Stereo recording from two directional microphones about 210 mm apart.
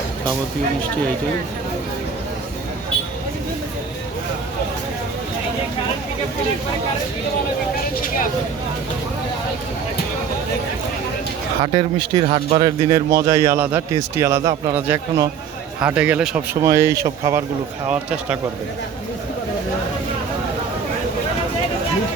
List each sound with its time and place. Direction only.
11.6 s a man's voice: 25° right (ahead or behind)